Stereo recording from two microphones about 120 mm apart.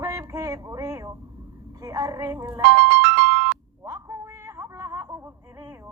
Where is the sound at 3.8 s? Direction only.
25° right (ahead or behind).